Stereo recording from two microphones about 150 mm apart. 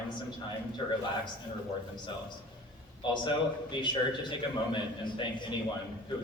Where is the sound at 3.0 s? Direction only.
30° left (ahead or behind).